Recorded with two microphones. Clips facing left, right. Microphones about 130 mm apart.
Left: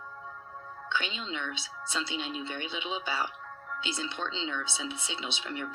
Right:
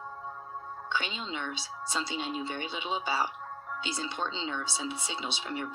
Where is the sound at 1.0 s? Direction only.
50° right (ahead or behind).